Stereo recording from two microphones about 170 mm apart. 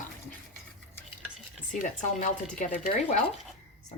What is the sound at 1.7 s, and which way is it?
Speech, 50° left (ahead or behind).